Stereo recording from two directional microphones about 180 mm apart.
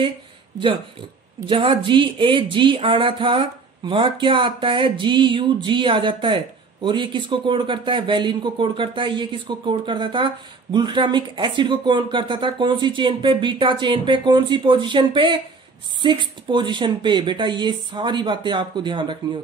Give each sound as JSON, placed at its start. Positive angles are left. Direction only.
{"t": 1.4, "sound": "speech", "side_deg": -30}